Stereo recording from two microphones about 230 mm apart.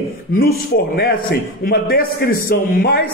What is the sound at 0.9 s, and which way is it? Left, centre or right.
A man's voice, left.